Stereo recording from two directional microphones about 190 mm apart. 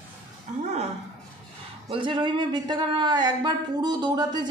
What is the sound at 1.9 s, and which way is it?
Speech, 25° right (ahead or behind).